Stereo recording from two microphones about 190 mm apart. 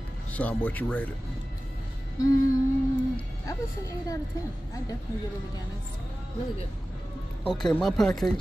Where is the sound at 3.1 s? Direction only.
15° left (ahead or behind).